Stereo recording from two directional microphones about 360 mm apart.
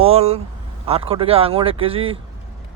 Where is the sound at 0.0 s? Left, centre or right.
Centre.